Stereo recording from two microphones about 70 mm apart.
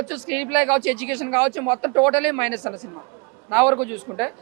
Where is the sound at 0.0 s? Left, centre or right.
Right.